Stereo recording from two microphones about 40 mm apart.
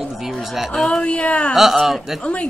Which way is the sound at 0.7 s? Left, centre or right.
Left.